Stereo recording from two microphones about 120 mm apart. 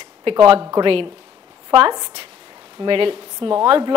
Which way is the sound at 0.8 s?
45° right (ahead or behind).